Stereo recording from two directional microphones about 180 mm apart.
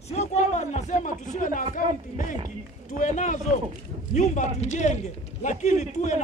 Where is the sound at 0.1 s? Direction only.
40° left (ahead or behind).